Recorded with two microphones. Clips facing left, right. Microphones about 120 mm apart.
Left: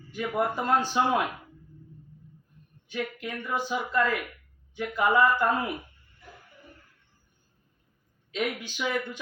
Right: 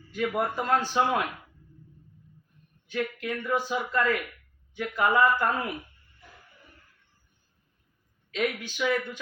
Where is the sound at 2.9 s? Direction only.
20° left (ahead or behind).